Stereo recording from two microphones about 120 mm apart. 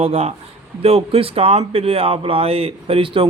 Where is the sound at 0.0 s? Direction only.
55° right (ahead or behind).